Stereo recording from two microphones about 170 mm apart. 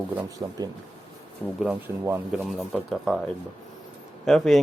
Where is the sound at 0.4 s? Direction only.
20° right (ahead or behind).